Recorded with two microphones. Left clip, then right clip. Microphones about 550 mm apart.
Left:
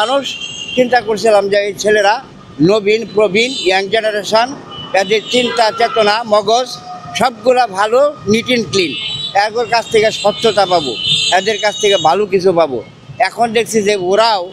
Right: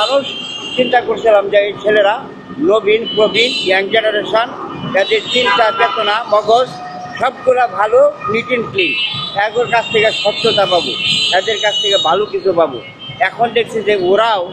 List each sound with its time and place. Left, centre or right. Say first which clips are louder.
0.9 s a man's voice: right 1 dB; left
4.9 s a man's voice: left 1 dB; left
13.2 s speech: left 1 dB; left